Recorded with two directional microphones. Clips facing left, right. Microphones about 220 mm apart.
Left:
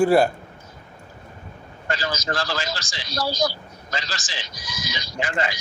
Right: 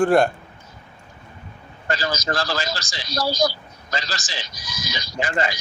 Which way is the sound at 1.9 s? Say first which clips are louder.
Right 2 dB; 40° right (ahead or behind).